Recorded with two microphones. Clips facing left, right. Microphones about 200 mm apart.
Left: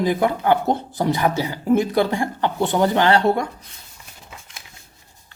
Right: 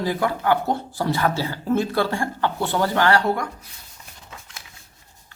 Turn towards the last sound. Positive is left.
turn(degrees=25)  # may be behind; listen again after turning